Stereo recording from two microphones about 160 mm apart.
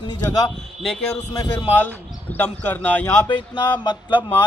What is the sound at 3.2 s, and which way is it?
Speech, 30° left (ahead or behind).